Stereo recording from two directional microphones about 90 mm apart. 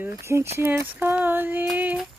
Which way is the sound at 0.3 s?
25° right (ahead or behind).